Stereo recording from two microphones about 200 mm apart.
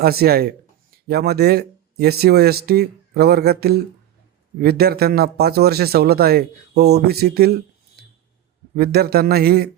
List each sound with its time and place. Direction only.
0.0 s a man's voice: 50° right (ahead or behind)